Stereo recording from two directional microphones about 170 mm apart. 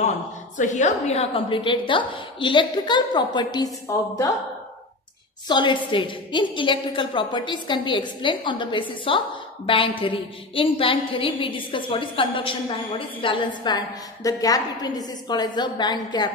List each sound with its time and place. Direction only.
0.6 s a woman's voice: 45° left (ahead or behind); by 3.7 s 25° left (ahead or behind)
5.5 s a woman's voice: 30° left (ahead or behind)